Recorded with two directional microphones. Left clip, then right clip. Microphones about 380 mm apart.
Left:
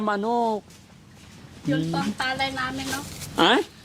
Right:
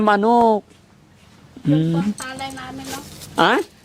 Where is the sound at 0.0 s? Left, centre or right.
Right.